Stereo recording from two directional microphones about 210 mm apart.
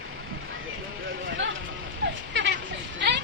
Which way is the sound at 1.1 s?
60° right (ahead or behind).